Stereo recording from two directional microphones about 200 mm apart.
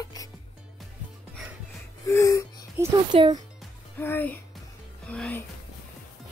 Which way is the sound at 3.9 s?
10° left (ahead or behind).